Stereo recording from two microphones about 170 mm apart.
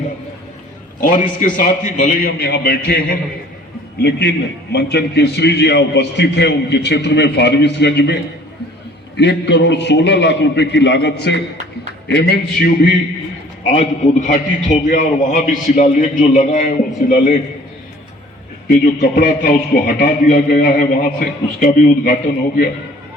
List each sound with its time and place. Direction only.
1.0 s a man's voice: 50° left (ahead or behind)
2.4 s a man's voice: 70° left (ahead or behind)
4.7 s a man's voice: 80° left
9.1 s a man's voice: 90° left
13.7 s a man's voice: 45° left (ahead or behind)
18.7 s a man's voice: 55° left (ahead or behind)